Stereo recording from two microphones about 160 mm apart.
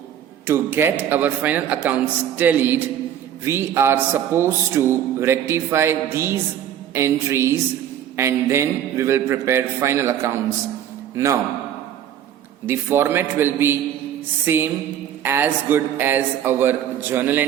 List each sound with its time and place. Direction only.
0.4 s a man's voice: 15° right (ahead or behind)
12.6 s a man's voice: 15° right (ahead or behind)